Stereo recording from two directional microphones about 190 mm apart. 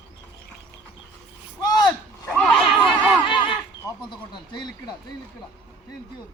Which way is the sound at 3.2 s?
25° left (ahead or behind).